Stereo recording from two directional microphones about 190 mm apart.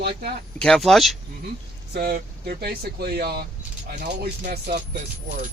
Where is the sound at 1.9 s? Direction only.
55° right (ahead or behind).